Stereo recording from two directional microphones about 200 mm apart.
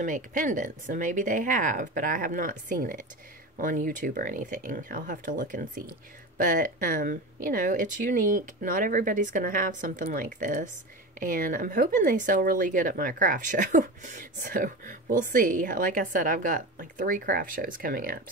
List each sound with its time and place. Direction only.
0.0 s speech: 40° right (ahead or behind)